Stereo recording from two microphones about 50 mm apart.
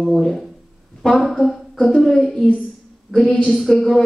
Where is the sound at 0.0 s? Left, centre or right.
Centre.